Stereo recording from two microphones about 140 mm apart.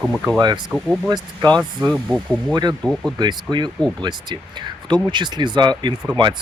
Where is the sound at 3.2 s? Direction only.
30° right (ahead or behind).